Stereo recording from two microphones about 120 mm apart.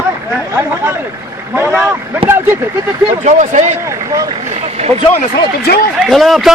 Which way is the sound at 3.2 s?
80° right.